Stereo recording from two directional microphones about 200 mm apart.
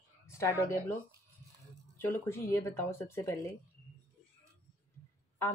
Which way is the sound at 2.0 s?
15° left (ahead or behind).